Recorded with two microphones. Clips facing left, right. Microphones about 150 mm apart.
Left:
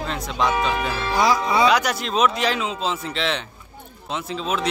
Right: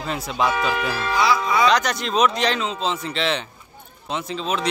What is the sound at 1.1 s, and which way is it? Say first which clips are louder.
Speech: left 1 dB; 45° left (ahead or behind).